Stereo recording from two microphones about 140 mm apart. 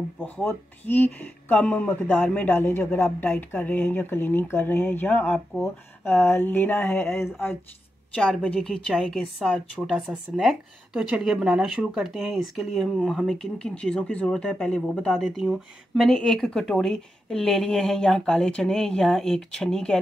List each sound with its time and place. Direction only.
0.2 s speech: 15° left (ahead or behind)